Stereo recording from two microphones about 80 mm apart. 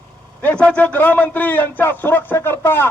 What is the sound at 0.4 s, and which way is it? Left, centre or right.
Speech, centre.